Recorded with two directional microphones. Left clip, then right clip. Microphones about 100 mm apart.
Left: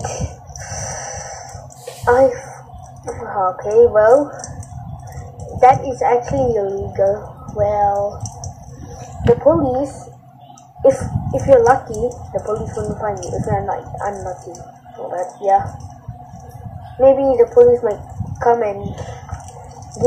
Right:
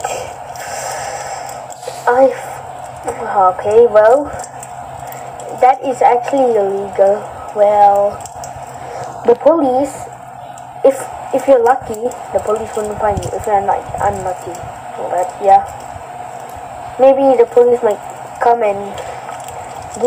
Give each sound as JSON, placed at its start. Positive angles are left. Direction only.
{"t": 0.0, "sound": "a sound", "side_deg": -15}
{"t": 2.0, "sound": "a woman's voice", "side_deg": -10}
{"t": 5.6, "sound": "a woman's voice", "side_deg": -15}
{"t": 9.4, "sound": "a woman's voice", "side_deg": -15}
{"t": 17.0, "sound": "a woman's voice", "side_deg": -15}